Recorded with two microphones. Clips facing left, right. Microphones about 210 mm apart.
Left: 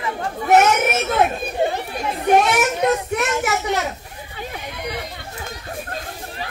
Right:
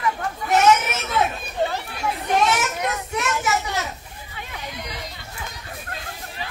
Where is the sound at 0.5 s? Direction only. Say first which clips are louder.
Left 3 dB; 55° left (ahead or behind).